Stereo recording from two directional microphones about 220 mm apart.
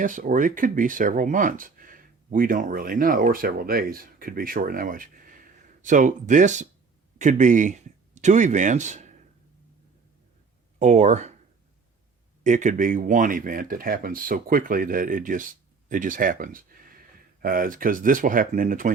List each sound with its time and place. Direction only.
0.0 s speech: 35° right (ahead or behind)
10.8 s speech: 30° right (ahead or behind)
12.4 s speech: 35° right (ahead or behind)